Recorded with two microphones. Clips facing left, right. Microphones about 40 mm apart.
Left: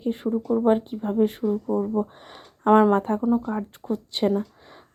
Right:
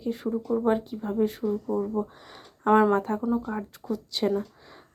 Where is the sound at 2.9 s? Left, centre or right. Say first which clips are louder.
Left 4 dB; left.